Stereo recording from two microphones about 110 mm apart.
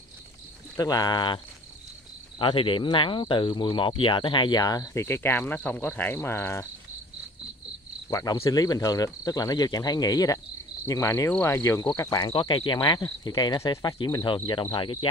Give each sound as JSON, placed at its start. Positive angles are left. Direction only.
{"t": 0.7, "sound": "speech", "side_deg": 35}
{"t": 4.9, "sound": "speech", "side_deg": 25}
{"t": 8.1, "sound": "speech", "side_deg": 35}
{"t": 11.9, "sound": "speech", "side_deg": 40}
{"t": 12.3, "sound": "speech", "side_deg": 50}